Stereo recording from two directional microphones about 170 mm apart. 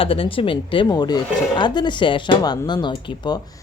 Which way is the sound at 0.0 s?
30° left (ahead or behind).